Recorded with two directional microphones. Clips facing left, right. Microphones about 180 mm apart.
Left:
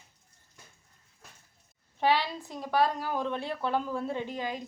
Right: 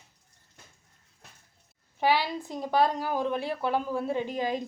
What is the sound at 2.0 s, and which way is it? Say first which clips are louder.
A woman's voice: right 1 dB; 10° right (ahead or behind).